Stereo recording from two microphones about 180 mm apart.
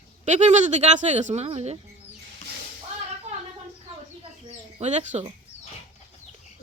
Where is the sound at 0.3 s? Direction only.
40° right (ahead or behind).